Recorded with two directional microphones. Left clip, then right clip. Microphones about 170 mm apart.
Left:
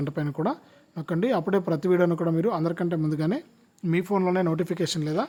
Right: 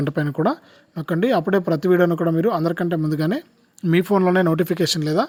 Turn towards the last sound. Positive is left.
turn(degrees=-25)  # may be behind; listen again after turning